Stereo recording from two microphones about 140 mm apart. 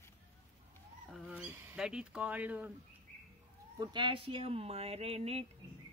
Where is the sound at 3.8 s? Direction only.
35° right (ahead or behind).